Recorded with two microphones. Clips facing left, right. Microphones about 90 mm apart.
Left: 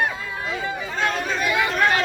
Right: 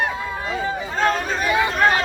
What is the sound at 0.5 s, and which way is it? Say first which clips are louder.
Chatter: right 3 dB; 40° right (ahead or behind).